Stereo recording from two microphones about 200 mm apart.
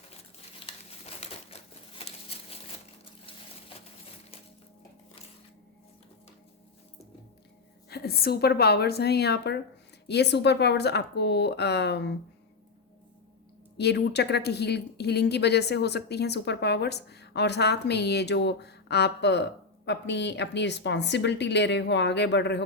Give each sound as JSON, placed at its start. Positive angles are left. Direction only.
{"t": 1.2, "sound": "crumpling", "side_deg": 30}
{"t": 2.3, "sound": "a sound", "side_deg": 30}
{"t": 7.9, "sound": "a woman's voice", "side_deg": 50}
{"t": 13.7, "sound": "speech", "side_deg": 55}